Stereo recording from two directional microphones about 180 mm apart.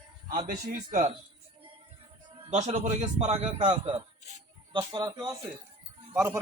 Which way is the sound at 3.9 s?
35° right (ahead or behind).